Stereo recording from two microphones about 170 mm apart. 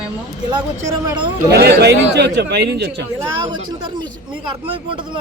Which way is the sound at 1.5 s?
75° right (ahead or behind).